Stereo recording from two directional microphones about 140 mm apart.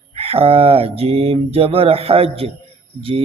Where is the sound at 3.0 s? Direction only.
40° right (ahead or behind).